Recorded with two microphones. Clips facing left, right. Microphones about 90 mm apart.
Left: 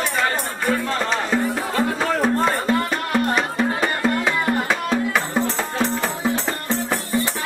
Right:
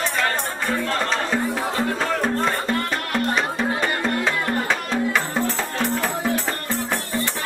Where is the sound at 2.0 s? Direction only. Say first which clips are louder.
Left 4 dB; 5° left (ahead or behind).